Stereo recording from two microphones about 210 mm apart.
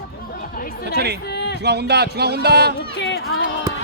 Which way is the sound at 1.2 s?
50° left (ahead or behind).